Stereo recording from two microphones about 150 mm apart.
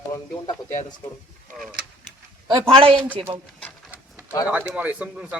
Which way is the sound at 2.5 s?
35° right (ahead or behind).